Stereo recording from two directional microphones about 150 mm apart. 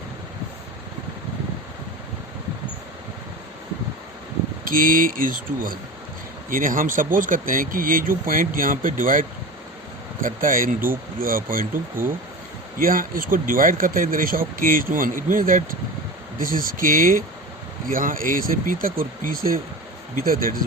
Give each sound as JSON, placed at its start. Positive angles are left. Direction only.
{"t": 4.6, "sound": "speech", "side_deg": -70}
{"t": 12.8, "sound": "speech", "side_deg": -70}